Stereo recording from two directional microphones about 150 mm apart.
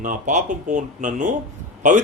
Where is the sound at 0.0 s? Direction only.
55° right (ahead or behind).